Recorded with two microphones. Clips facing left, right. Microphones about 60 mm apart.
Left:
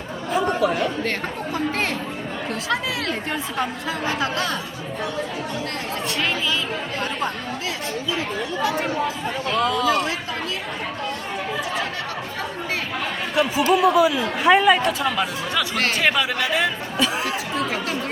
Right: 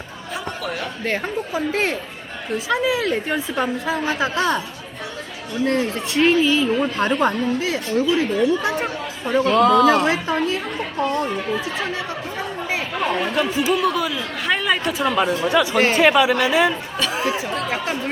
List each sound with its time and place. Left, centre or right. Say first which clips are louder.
0.3 s speech: left 7 dB; centre
1.1 s speech: right 3 dB; centre
3.8 s speech: right 3 dB; right
6.2 s speech: right 11 dB; right
9.6 s speech: right 6 dB; right
10.1 s a woman's voice: right 7 dB; right
13.3 s speech: left 1 dB; centre
14.8 s speech: right 3 dB; centre
17.7 s chatter: right 2 dB; right